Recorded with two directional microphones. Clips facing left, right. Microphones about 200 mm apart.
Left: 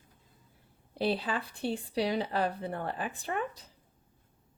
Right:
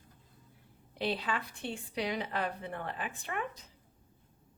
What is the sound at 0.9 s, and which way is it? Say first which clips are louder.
Speech: left 4 dB; 35° left (ahead or behind).